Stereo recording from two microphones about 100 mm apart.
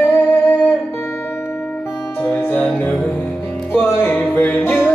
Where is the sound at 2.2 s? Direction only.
15° left (ahead or behind).